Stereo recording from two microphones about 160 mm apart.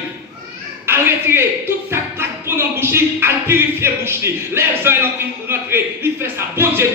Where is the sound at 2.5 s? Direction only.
15° right (ahead or behind).